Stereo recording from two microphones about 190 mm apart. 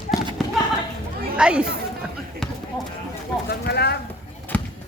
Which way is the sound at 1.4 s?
5° right (ahead or behind).